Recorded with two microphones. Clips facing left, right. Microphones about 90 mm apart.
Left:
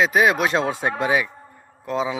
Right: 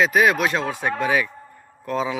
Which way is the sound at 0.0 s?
25° left (ahead or behind).